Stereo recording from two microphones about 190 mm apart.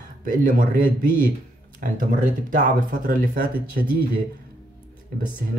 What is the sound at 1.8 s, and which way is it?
Speech, 50° right (ahead or behind).